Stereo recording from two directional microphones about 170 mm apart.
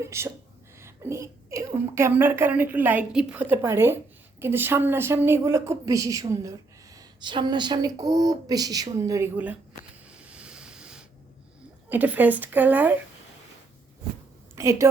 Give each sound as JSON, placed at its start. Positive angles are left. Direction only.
{"t": 0.0, "sound": "a woman's voice", "side_deg": -15}
{"t": 10.1, "sound": "a sound", "side_deg": -5}
{"t": 11.9, "sound": "a woman's voice", "side_deg": -10}
{"t": 14.5, "sound": "a woman's voice", "side_deg": -15}